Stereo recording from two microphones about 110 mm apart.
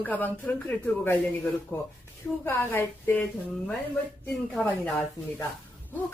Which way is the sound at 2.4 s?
20° left (ahead or behind).